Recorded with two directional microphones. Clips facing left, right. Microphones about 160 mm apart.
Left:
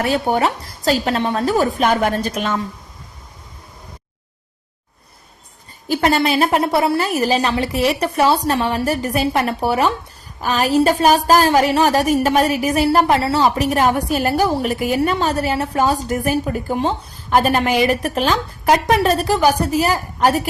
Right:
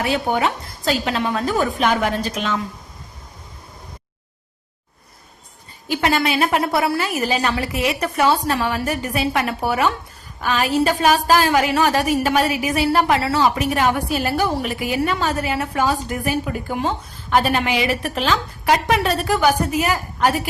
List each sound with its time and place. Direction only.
0.0 s a woman's voice: 40° left (ahead or behind)
5.9 s a woman's voice: 40° left (ahead or behind)
7.0 s a woman's voice: 40° left (ahead or behind)
13.7 s a woman's voice: 40° left (ahead or behind)